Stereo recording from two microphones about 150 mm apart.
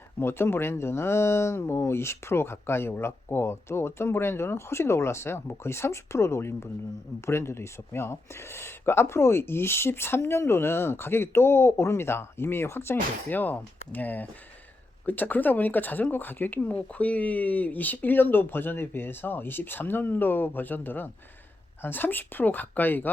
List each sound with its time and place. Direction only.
0.2 s speech: 15° left (ahead or behind)